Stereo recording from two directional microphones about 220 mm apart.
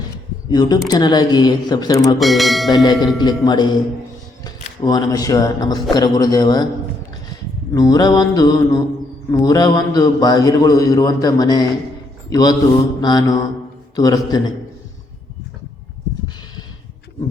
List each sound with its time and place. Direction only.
0.5 s a man's voice: 20° left (ahead or behind)
2.1 s speech: centre (ahead or behind)
2.6 s a man's voice: 20° left (ahead or behind)
7.7 s a man's voice: 15° left (ahead or behind)